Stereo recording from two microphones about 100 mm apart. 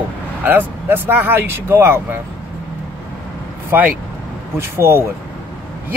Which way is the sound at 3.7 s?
20° right (ahead or behind).